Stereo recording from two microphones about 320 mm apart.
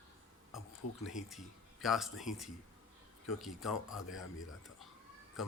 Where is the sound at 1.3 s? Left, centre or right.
Centre.